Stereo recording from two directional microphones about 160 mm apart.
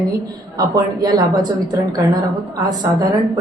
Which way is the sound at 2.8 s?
25° right (ahead or behind).